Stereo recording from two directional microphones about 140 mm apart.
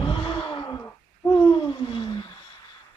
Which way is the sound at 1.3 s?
20° left (ahead or behind).